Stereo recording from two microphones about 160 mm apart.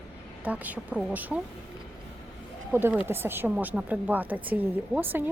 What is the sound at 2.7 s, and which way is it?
A woman's voice, 10° right (ahead or behind).